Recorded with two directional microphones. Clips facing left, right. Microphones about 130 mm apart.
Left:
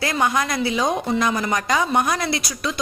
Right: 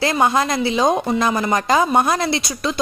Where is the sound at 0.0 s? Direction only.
25° right (ahead or behind).